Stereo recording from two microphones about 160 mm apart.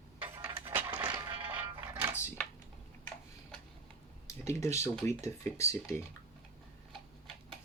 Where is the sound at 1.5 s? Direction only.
10° right (ahead or behind).